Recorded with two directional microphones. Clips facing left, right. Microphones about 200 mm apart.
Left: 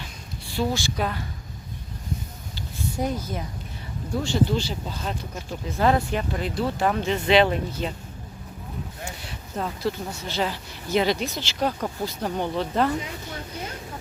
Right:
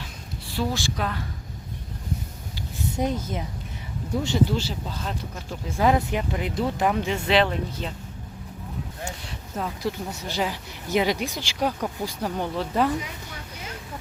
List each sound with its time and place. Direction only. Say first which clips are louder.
0.4 s speech: left 1 dB; centre (ahead or behind)
2.6 s a sound: right 1 dB; 20° right (ahead or behind)
4.1 s speech: right 1 dB; 20° right (ahead or behind)
4.4 s speech: left 1 dB; 5° right (ahead or behind)
5.8 s speech: even; 15° right (ahead or behind)
7.4 s speech: left 3 dB; 5° left (ahead or behind)
9.8 s speech: left 1 dB; 15° right (ahead or behind)